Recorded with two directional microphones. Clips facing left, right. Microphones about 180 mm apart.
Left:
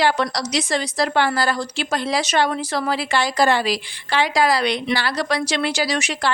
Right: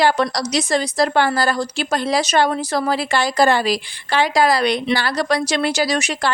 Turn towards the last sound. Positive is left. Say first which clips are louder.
# right 2 dB
turn(degrees=-45)  # may be behind; listen again after turning